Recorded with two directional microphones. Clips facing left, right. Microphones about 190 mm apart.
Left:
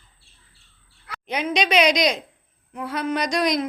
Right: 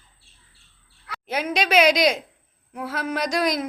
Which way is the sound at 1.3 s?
5° right (ahead or behind).